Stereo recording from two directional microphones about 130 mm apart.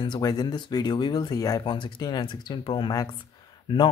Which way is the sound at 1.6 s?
40° left (ahead or behind).